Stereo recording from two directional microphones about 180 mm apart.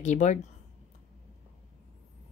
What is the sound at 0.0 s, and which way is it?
Speech, 40° left (ahead or behind).